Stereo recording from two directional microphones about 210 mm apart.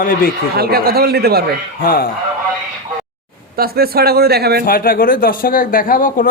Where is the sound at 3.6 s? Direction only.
45° right (ahead or behind).